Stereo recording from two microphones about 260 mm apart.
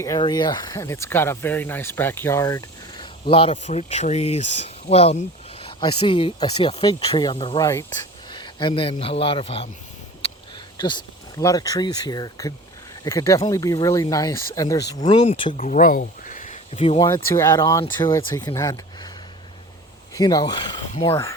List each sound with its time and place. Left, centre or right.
0.0 s a man's voice: centre
10.8 s speech: centre
15.5 s speech: left
17.1 s speech: centre
20.1 s speech: centre